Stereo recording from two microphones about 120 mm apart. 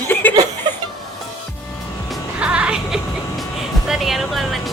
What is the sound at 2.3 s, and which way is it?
Speech, 10° right (ahead or behind).